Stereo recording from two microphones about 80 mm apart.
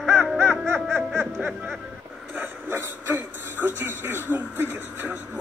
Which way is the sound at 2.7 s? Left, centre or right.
Right.